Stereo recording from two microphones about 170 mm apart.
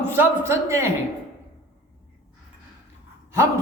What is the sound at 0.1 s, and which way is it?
Speech, 15° right (ahead or behind).